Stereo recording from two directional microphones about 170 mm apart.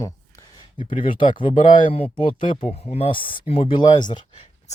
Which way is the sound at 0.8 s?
30° left (ahead or behind).